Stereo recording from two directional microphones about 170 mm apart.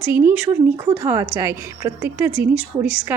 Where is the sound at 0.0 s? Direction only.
10° right (ahead or behind).